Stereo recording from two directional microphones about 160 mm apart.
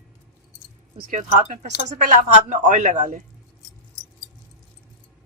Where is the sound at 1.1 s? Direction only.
50° right (ahead or behind).